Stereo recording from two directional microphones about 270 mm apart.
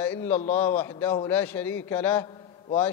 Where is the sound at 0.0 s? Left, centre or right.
Centre.